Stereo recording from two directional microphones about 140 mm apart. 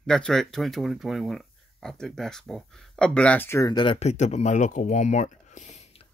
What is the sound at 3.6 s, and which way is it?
Speech, 35° left (ahead or behind).